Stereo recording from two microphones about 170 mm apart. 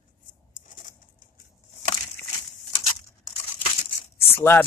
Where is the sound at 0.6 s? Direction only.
50° left (ahead or behind).